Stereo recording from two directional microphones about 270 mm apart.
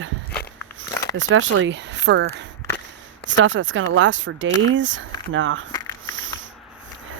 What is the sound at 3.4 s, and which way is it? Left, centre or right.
Speech, right.